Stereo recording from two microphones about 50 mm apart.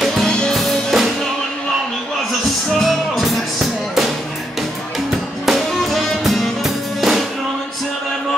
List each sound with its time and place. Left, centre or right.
0.2 s music: centre
0.6 s music: centre
2.7 s music: centre
5.1 s music: centre